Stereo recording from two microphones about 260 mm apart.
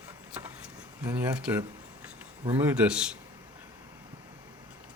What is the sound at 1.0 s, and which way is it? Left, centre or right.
Speech, centre.